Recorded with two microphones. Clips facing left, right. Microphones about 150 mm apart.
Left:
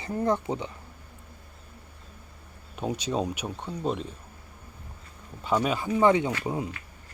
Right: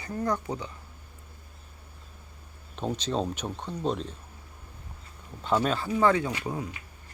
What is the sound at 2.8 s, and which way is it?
Speech, 10° left (ahead or behind).